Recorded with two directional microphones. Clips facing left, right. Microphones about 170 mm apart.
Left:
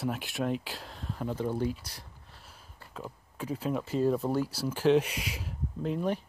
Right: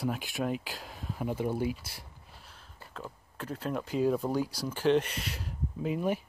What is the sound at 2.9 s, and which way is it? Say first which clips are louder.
Speech: left 2 dB; 10° left (ahead or behind).